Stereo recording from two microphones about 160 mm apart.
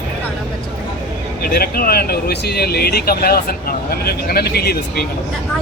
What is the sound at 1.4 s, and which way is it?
Speech, 70° left (ahead or behind).